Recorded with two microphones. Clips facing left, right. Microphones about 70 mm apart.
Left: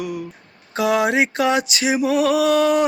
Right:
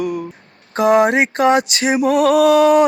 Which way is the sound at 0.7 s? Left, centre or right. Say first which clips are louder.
Right 5 dB; right.